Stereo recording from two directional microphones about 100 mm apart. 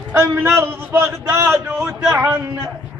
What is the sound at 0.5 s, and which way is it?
A man's voice, 20° right (ahead or behind).